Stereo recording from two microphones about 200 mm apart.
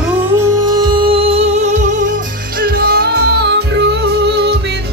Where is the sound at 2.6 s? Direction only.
50° right (ahead or behind).